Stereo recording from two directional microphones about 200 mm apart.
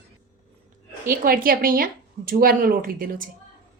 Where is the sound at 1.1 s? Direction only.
45° right (ahead or behind).